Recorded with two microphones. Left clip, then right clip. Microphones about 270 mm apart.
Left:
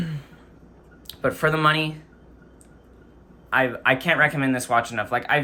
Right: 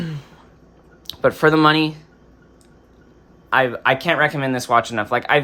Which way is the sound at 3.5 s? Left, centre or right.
Centre.